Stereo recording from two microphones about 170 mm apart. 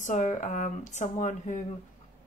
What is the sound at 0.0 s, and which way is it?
Speech, 45° left (ahead or behind).